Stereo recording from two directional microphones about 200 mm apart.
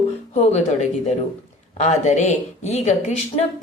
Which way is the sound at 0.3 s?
30° left (ahead or behind).